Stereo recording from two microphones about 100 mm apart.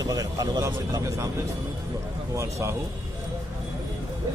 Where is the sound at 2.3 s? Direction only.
30° right (ahead or behind).